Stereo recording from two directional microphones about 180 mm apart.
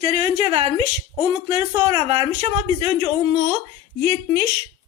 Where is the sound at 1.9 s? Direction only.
30° right (ahead or behind).